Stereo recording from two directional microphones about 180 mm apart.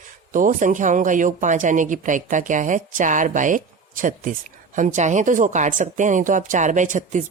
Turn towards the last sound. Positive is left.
turn(degrees=-45)  # may be behind; listen again after turning